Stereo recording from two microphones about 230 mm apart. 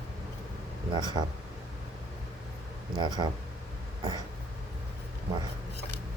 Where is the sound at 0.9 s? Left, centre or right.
Centre.